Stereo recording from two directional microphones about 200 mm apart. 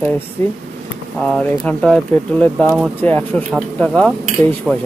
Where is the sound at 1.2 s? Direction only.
5° left (ahead or behind).